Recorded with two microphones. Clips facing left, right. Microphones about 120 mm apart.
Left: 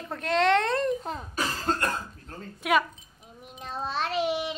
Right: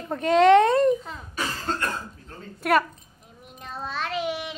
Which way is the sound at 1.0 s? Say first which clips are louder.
Left 1 dB; 40° left (ahead or behind).